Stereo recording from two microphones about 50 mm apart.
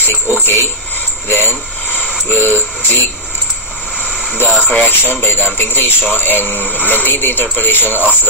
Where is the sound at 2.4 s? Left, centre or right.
Right.